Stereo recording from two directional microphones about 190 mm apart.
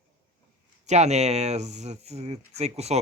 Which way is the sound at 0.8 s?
35° right (ahead or behind).